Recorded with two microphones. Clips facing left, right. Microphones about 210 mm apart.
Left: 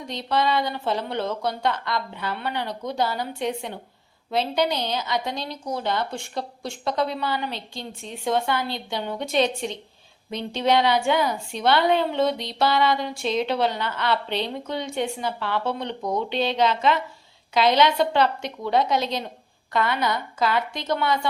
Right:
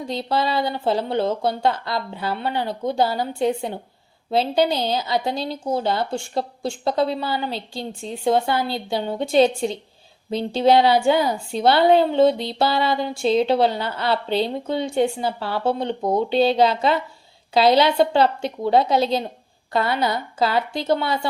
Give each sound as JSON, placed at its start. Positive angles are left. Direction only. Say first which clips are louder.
{"t": 0.1, "sound": "a woman's voice", "louder": "even", "side_deg": -30}